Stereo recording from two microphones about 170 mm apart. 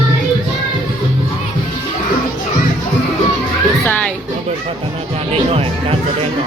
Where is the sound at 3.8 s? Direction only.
10° left (ahead or behind).